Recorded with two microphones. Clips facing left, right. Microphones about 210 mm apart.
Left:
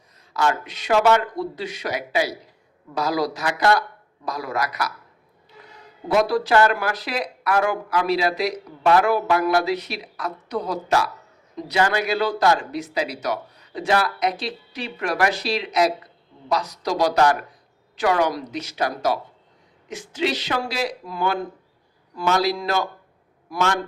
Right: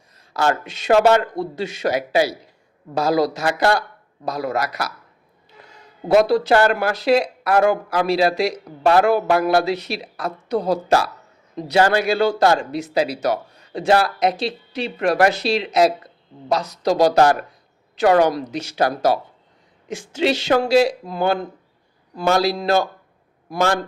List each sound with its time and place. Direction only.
0.4 s speech: 25° right (ahead or behind)
6.1 s speech: 25° right (ahead or behind)
10.0 s a woman's voice: 50° right (ahead or behind)
10.5 s speech: 30° right (ahead or behind)